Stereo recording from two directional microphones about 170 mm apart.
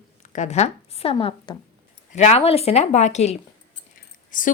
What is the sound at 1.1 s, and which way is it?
Speech, 25° left (ahead or behind).